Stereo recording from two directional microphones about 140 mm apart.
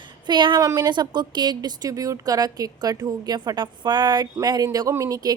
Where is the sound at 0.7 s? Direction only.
30° right (ahead or behind).